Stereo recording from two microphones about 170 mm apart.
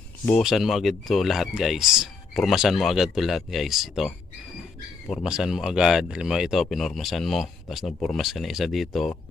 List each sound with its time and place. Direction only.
0.3 s speech: centre (ahead or behind)